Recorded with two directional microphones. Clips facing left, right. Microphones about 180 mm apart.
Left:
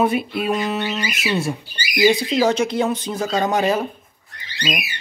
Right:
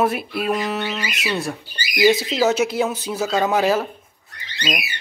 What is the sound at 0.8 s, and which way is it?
Speech, 15° left (ahead or behind).